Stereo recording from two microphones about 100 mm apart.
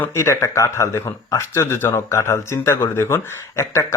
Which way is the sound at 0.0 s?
25° left (ahead or behind).